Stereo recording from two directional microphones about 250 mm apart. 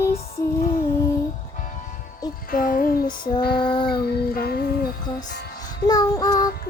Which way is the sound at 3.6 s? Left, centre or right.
Centre.